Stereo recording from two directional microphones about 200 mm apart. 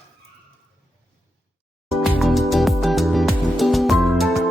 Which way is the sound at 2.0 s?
Centre (ahead or behind).